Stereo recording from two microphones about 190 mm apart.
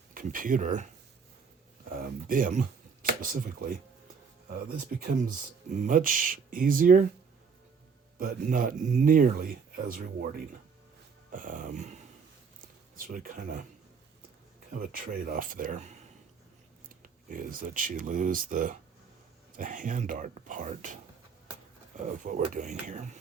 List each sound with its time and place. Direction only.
0.1 s speech: 45° right (ahead or behind)
1.9 s speech: 45° right (ahead or behind)
5.8 s speech: 45° right (ahead or behind)
8.2 s speech: 45° right (ahead or behind)
13.0 s speech: 45° right (ahead or behind)
14.7 s speech: 50° right (ahead or behind)
17.0 s speech: 45° right (ahead or behind)